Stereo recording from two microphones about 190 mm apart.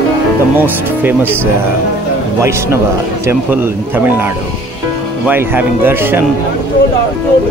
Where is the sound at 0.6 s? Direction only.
10° right (ahead or behind).